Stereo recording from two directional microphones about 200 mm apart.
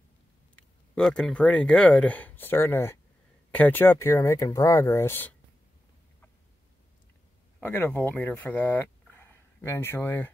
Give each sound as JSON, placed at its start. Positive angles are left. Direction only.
{"t": 0.6, "sound": "speech", "side_deg": 5}
{"t": 7.6, "sound": "speech", "side_deg": 10}